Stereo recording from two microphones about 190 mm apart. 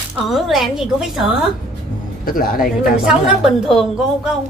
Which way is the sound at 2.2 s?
50° left (ahead or behind).